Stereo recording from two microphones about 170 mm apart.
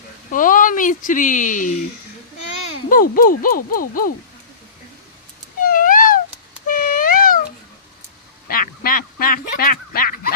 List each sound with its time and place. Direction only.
0.3 s speech: 50° left (ahead or behind)
2.9 s speech: 55° left (ahead or behind)
5.6 s a sound: 55° left (ahead or behind)
8.4 s goose: 60° left (ahead or behind)